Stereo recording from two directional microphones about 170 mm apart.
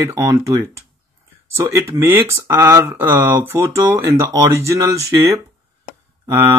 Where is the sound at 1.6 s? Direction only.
15° right (ahead or behind).